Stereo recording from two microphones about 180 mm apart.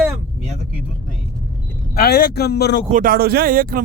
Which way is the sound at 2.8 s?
50° right (ahead or behind).